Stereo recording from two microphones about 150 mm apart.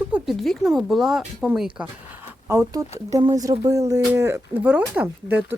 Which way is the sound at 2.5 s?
20° right (ahead or behind).